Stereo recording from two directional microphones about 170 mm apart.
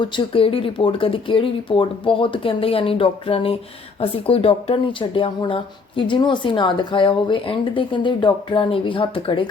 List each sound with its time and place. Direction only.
0.0 s speech: 30° left (ahead or behind)